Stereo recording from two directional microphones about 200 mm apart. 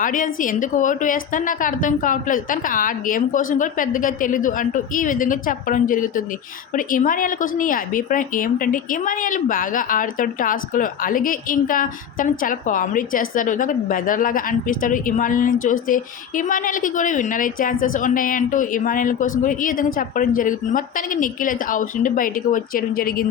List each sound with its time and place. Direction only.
0.0 s a woman's voice: 45° left (ahead or behind)